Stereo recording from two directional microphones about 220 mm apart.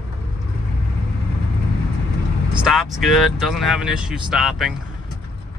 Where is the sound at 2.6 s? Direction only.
Centre (ahead or behind).